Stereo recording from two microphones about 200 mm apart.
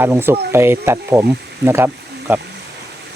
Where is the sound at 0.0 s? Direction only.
10° right (ahead or behind).